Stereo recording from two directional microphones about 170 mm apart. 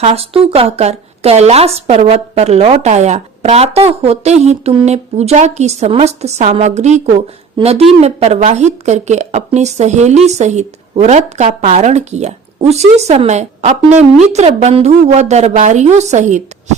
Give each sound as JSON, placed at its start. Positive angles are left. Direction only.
{"t": 0.0, "sound": "a woman's voice", "side_deg": -35}